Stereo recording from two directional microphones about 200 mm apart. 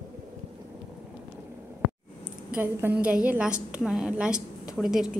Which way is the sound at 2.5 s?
10° right (ahead or behind).